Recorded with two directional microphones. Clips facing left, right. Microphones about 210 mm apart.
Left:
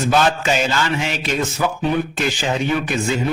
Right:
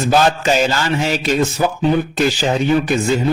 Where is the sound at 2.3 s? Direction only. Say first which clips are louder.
Right 3 dB; 35° right (ahead or behind).